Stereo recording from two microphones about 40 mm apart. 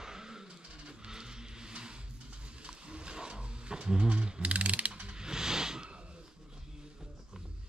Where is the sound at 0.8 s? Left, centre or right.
Centre.